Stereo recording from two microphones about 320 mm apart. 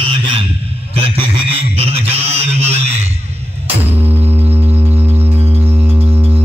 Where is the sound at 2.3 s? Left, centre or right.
Centre.